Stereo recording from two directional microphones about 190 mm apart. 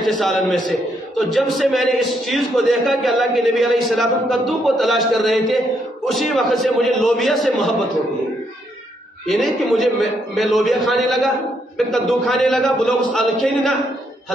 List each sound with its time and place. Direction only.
0.2 s a man's voice: centre (ahead or behind)
9.3 s a man's voice: centre (ahead or behind)